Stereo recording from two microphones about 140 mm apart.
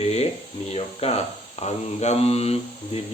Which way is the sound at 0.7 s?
45° left (ahead or behind).